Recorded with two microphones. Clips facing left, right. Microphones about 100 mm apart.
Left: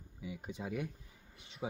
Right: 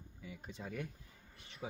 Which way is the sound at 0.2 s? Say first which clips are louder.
Left 5 dB; 15° left (ahead or behind).